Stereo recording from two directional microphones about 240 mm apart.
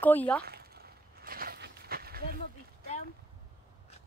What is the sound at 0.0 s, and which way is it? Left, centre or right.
Speech, centre.